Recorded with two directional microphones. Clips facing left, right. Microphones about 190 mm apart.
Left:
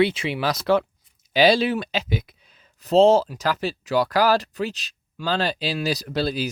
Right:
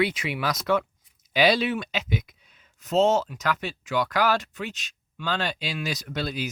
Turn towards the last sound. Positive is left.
turn(degrees=35)  # may be behind; listen again after turning